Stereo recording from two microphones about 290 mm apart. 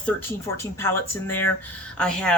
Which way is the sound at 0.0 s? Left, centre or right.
Centre.